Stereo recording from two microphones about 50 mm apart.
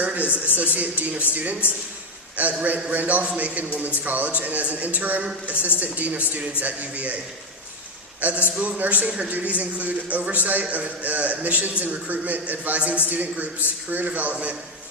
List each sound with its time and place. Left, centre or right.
0.0 s a man's voice: right
8.2 s a man's voice: right
9.0 s a man's voice: centre
9.3 s a man's voice: right